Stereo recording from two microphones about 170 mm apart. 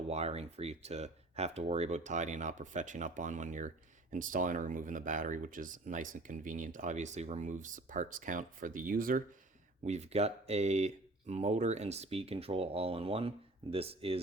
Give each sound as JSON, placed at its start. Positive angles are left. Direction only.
{"t": 0.1, "sound": "speech", "side_deg": -35}
{"t": 9.8, "sound": "speech", "side_deg": -40}